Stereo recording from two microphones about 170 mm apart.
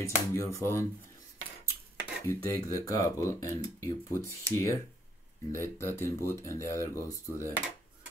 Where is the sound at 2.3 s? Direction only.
20° left (ahead or behind).